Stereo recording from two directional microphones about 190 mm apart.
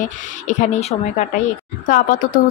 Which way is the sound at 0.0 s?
40° left (ahead or behind).